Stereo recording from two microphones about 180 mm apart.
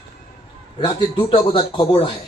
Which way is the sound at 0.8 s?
25° left (ahead or behind).